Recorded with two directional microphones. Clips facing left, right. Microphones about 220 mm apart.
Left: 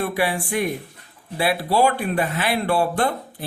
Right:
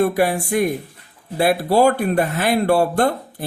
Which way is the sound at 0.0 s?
45° right (ahead or behind).